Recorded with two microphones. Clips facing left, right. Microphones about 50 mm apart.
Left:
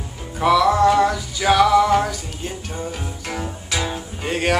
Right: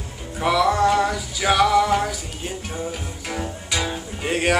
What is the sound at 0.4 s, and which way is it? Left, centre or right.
Music, centre.